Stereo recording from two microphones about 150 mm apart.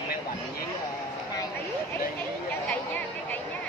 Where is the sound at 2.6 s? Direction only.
10° left (ahead or behind).